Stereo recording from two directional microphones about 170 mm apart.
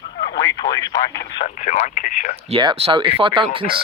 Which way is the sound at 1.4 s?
45° left (ahead or behind).